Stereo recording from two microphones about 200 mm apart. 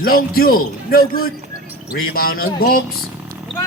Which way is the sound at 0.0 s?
45° left (ahead or behind).